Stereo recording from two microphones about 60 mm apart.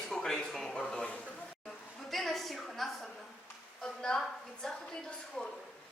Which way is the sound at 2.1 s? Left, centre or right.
Centre.